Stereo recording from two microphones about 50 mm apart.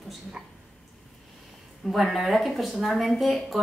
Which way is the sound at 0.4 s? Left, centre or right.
Right.